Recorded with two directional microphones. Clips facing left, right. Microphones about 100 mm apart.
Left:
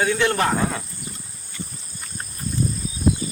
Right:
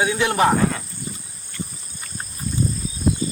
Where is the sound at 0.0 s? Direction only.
15° right (ahead or behind).